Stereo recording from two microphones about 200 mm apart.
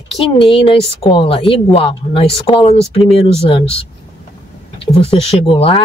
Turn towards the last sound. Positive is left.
turn(degrees=25)  # may be behind; listen again after turning